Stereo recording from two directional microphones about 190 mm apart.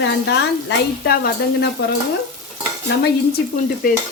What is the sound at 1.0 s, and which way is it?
Speech, 55° left (ahead or behind).